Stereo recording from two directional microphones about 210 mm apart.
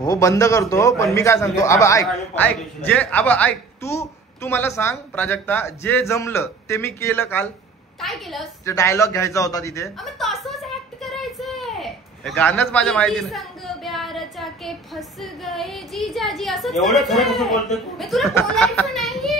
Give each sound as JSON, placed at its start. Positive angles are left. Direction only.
{"t": 0.0, "sound": "a man's voice", "side_deg": 15}
{"t": 8.0, "sound": "speech", "side_deg": 0}
{"t": 8.6, "sound": "a man's voice", "side_deg": 15}
{"t": 9.8, "sound": "a woman's voice", "side_deg": 0}